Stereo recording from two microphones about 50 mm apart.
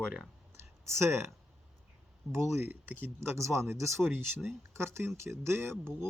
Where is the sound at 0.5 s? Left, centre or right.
Right.